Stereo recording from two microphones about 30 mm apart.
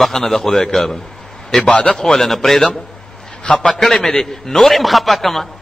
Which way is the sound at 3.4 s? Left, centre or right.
Left.